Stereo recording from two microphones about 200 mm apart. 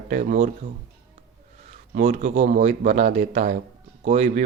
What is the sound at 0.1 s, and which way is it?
Speech, 40° right (ahead or behind).